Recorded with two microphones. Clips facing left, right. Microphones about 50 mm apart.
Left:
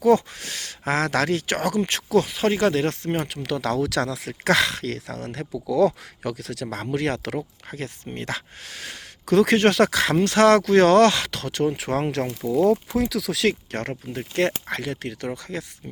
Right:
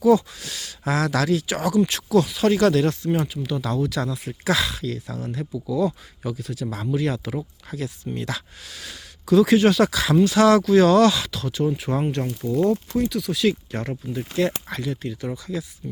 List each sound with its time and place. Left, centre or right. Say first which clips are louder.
0.0 s speech: right 1 dB; left
2.8 s speech: right 2 dB; left
3.2 s speech: left 1 dB; left
4.4 s speech: left 2 dB; left
7.3 s speech: even; left
13.0 s speech: right 1 dB; left
15.3 s speech: right 2 dB; left